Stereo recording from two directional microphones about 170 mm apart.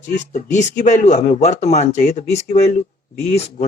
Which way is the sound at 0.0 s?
45° left (ahead or behind).